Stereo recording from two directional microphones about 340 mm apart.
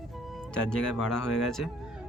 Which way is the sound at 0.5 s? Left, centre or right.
Centre.